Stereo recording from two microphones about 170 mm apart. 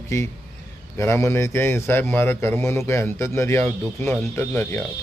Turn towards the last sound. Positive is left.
turn(degrees=15)  # may be behind; listen again after turning